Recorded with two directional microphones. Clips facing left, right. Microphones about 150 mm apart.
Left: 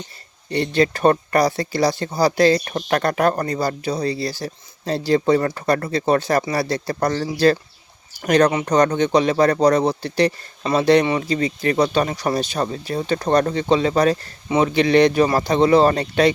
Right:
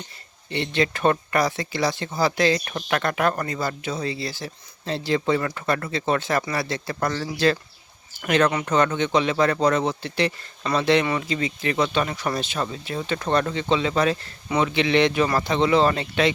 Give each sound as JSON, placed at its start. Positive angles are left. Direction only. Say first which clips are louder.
{"t": 0.5, "sound": "speech", "louder": "left 5 dB", "side_deg": 40}